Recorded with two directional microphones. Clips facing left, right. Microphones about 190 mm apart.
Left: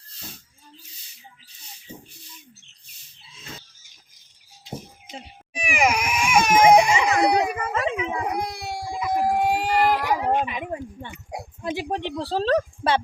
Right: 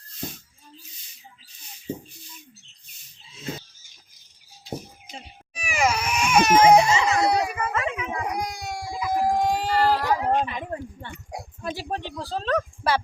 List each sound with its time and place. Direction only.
5.5 s crying: 15° left (ahead or behind)
9.3 s a sound: 5° left (ahead or behind)
11.3 s oink: 20° left (ahead or behind)
12.2 s speech: 30° left (ahead or behind)